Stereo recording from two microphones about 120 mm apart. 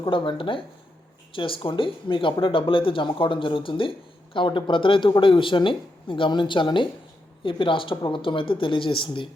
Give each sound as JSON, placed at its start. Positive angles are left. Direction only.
{"t": 0.0, "sound": "speech", "side_deg": 45}